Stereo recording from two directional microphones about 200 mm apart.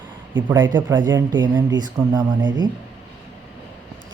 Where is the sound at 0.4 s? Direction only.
20° right (ahead or behind).